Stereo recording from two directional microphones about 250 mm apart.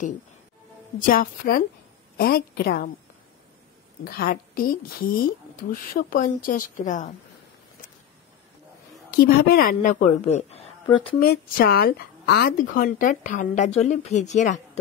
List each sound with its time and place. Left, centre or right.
0.9 s speech: left
4.0 s a woman's voice: left
9.1 s a woman's voice: left
11.1 s speech: left